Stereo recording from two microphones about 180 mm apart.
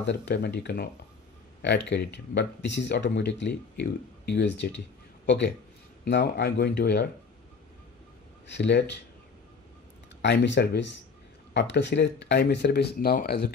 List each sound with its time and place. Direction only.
0.0 s speech: 75° left (ahead or behind)
1.9 s speech: 70° left (ahead or behind)
8.5 s speech: 70° left (ahead or behind)
10.2 s speech: 70° left (ahead or behind)
13.0 s speech: 55° left (ahead or behind)